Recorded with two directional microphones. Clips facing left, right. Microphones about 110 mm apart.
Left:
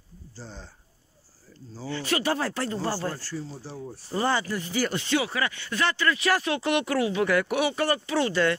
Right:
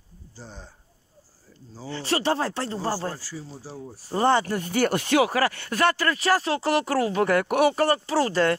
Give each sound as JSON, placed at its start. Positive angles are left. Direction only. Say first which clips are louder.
{"t": 0.4, "sound": "speech", "louder": "even", "side_deg": -10}
{"t": 1.9, "sound": "speech", "louder": "right 2 dB", "side_deg": -30}
{"t": 3.2, "sound": "speech", "louder": "left 3 dB", "side_deg": -5}
{"t": 4.1, "sound": "speech", "louder": "right 5 dB", "side_deg": -45}